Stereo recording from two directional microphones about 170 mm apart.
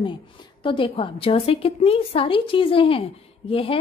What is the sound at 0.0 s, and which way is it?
A woman's voice, 30° left (ahead or behind).